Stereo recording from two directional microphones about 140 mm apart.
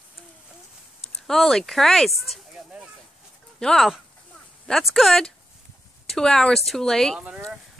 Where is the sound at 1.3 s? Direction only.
5° left (ahead or behind).